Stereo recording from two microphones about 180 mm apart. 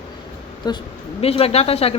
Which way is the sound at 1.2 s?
35° left (ahead or behind).